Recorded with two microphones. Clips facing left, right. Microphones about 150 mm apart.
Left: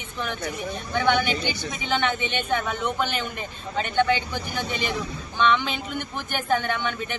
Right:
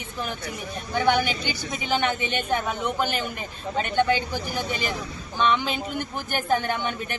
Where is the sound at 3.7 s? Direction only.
40° right (ahead or behind).